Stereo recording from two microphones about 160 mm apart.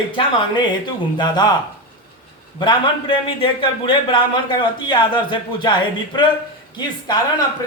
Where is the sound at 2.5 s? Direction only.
30° left (ahead or behind).